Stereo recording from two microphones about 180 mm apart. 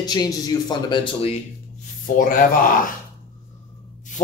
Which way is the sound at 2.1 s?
50° left (ahead or behind).